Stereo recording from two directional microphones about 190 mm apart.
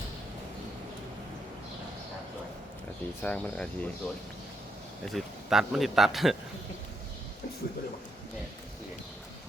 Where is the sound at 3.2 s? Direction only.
5° left (ahead or behind).